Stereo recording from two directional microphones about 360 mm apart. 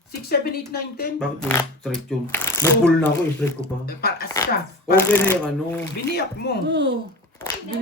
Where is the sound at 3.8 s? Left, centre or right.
Left.